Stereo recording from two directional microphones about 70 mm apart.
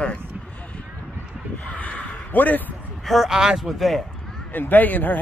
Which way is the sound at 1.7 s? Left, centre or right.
Centre.